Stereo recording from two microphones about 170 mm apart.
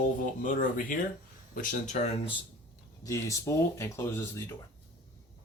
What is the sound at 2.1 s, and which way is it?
Speech, 30° left (ahead or behind).